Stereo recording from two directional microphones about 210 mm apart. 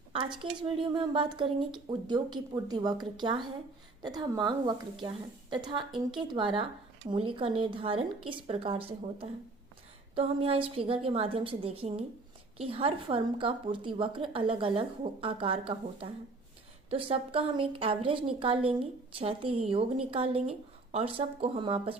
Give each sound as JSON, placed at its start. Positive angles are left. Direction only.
{"t": 0.1, "sound": "speech", "side_deg": -25}